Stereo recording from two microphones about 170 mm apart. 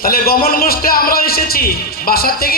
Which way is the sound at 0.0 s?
60° left (ahead or behind).